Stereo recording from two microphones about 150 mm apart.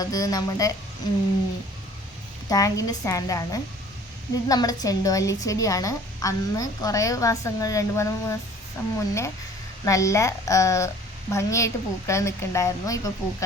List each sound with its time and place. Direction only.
0.0 s a woman's voice: 25° left (ahead or behind)
2.5 s a woman's voice: 20° left (ahead or behind)